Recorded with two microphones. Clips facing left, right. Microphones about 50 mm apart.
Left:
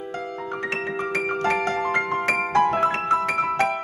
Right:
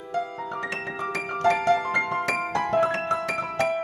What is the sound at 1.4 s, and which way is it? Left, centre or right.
Music, left.